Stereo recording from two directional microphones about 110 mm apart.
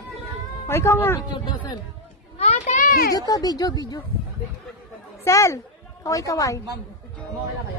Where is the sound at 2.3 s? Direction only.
80° left.